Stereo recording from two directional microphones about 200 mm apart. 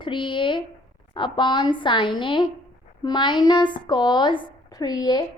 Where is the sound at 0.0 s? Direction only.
25° left (ahead or behind).